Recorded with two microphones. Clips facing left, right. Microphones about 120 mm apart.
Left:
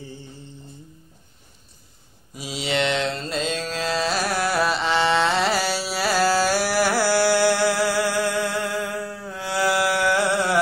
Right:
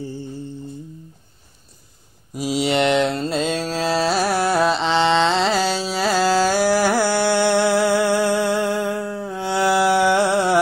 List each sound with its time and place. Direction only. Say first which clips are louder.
2.6 s mantra: right 5 dB; 50° right (ahead or behind)
3.7 s carnatic music: right 5 dB; 35° right (ahead or behind); by 5.9 s 15° right (ahead or behind)
6.0 s a sound: right 2 dB; 20° right (ahead or behind)
7.5 s music: right 4 dB; 25° right (ahead or behind)